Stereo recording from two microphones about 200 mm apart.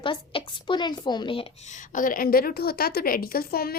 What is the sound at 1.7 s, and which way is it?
A woman's voice, 40° left (ahead or behind).